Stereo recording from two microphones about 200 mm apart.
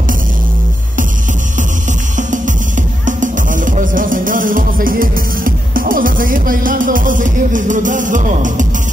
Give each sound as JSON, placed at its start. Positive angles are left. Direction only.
{"t": 2.1, "sound": "music", "side_deg": -40}